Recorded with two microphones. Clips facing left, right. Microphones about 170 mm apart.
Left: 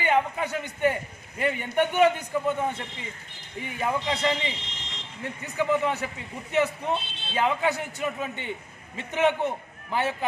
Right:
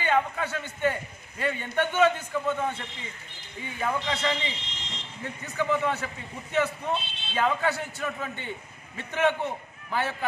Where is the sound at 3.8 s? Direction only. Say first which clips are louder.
Left 2 dB; 15° left (ahead or behind).